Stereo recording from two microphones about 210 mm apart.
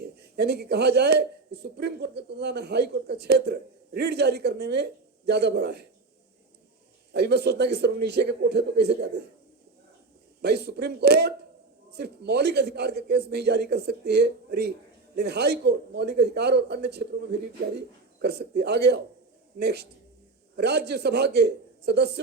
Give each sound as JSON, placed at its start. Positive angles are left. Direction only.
{"t": 0.0, "sound": "a man's voice", "side_deg": -50}
{"t": 7.1, "sound": "a man's voice", "side_deg": -50}
{"t": 10.4, "sound": "a man's voice", "side_deg": -50}